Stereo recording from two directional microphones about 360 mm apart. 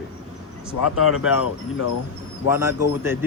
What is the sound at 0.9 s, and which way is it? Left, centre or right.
Speech, left.